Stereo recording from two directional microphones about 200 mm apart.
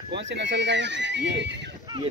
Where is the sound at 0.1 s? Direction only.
60° right (ahead or behind).